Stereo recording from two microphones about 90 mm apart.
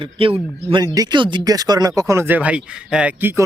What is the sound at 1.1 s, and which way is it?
Speech, 60° right (ahead or behind).